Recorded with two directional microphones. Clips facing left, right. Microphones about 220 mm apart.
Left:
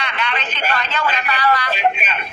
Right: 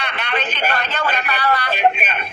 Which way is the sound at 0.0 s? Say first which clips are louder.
Right 1 dB; 60° right (ahead or behind).